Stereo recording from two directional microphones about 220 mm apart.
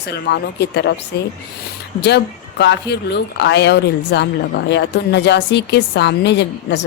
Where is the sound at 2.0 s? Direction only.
50° left (ahead or behind).